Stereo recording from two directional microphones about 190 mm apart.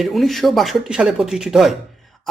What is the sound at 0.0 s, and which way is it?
Speech, centre (ahead or behind).